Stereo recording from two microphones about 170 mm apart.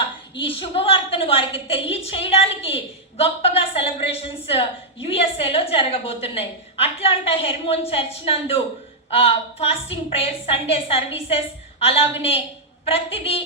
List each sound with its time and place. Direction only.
0.3 s a woman's voice: 30° left (ahead or behind)